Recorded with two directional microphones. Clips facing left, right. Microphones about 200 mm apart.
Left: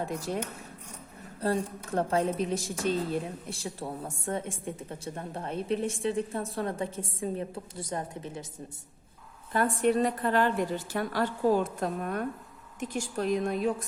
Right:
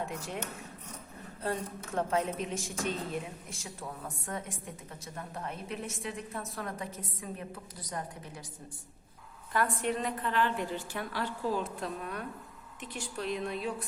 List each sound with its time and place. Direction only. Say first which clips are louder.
0.0 s speech: left 5 dB; 35° left (ahead or behind)
1.4 s a woman's voice: left 6 dB; 35° left (ahead or behind)
9.5 s a woman's voice: left 6 dB; 30° left (ahead or behind)